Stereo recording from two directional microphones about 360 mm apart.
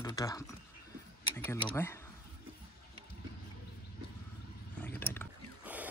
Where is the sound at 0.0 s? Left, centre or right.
Centre.